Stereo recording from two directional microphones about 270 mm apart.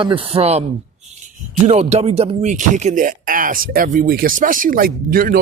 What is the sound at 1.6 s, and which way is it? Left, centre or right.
Speech, right.